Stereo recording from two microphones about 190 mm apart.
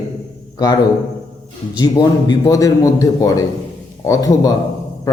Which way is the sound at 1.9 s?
20° left (ahead or behind).